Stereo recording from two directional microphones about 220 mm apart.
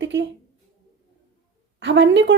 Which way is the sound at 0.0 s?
55° right (ahead or behind).